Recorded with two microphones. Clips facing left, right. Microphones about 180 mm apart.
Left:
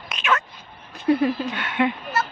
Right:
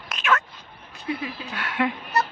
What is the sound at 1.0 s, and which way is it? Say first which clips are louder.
Speech: left 11 dB; 50° left (ahead or behind).